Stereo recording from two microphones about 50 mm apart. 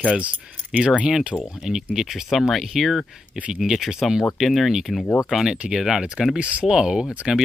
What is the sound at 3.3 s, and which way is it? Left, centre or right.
Speech, right.